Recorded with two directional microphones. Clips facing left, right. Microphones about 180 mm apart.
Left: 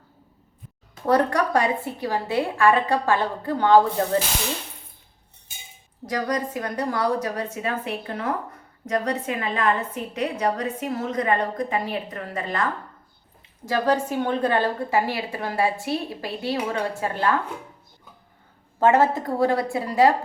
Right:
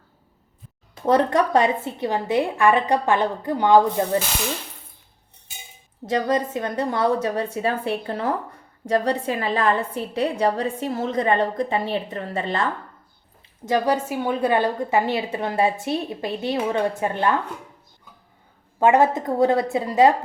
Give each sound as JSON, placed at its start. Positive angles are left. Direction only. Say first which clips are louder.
{"t": 1.0, "sound": "a woman's voice", "louder": "right 2 dB", "side_deg": -20}
{"t": 6.1, "sound": "a woman's voice", "louder": "right 4 dB", "side_deg": -25}
{"t": 13.7, "sound": "a woman's voice", "louder": "right 1 dB", "side_deg": -10}
{"t": 18.8, "sound": "a woman's voice", "louder": "right 1 dB", "side_deg": -15}